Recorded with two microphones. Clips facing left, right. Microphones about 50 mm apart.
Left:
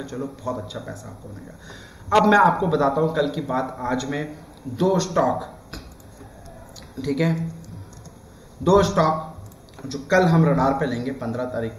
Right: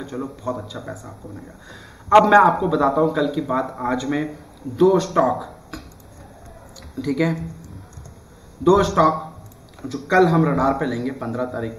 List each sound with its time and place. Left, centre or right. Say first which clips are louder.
0.0 s a man's voice: right 1 dB; centre
7.0 s a man's voice: right 1 dB; centre
8.6 s a man's voice: right 2 dB; centre